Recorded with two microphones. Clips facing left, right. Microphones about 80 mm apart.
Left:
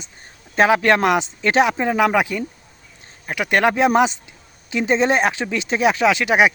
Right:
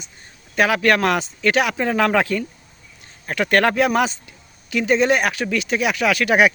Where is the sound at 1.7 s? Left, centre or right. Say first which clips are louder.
Left 1 dB; centre.